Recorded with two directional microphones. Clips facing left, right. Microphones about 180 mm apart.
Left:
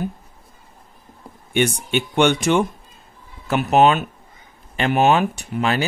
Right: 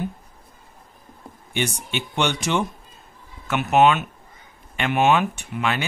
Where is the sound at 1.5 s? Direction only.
55° left (ahead or behind).